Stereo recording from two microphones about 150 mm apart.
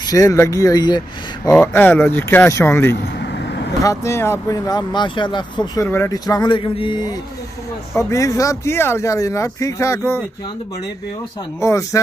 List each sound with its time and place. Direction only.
0.0 s speech: 25° left (ahead or behind)
1.6 s speech: 15° left (ahead or behind); by 5.4 s 30° left (ahead or behind)
5.8 s speech: 20° left (ahead or behind)
8.1 s speech: 20° left (ahead or behind)
11.6 s speech: 20° left (ahead or behind)